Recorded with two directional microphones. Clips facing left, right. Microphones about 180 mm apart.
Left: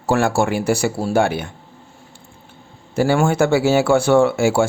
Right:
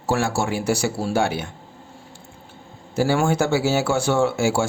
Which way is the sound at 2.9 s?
60° left (ahead or behind).